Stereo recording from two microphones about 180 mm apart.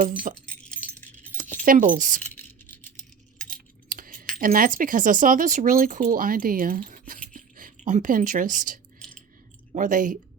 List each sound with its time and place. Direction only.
0.0 s speech: 45° right (ahead or behind)
0.3 s keys jangling: 5° left (ahead or behind)
1.6 s speech: 50° right (ahead or behind)
2.2 s a sound: 10° left (ahead or behind)
3.3 s keys jangling: 5° left (ahead or behind)
3.8 s a sound: 50° right (ahead or behind)
4.4 s speech: 50° right (ahead or behind)